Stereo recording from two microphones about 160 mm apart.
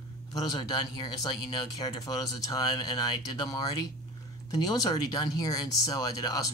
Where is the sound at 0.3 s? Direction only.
25° left (ahead or behind).